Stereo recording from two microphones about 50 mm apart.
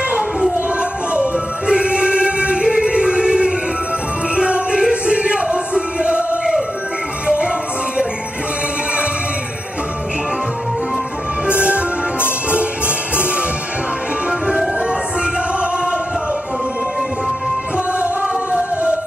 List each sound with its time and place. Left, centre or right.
0.1 s a sound: centre
1.7 s choir: centre
4.4 s music: centre
11.4 s music: right
14.4 s music: centre
17.7 s music: right